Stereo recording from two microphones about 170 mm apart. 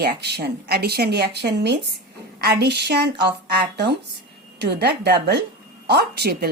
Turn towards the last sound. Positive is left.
turn(degrees=-70)  # may be behind; listen again after turning